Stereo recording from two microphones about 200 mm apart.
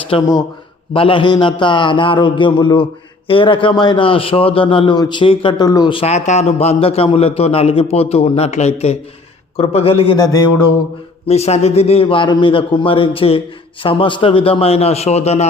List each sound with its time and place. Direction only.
0.1 s a man's voice: 20° left (ahead or behind)
11.3 s a man's voice: 30° left (ahead or behind)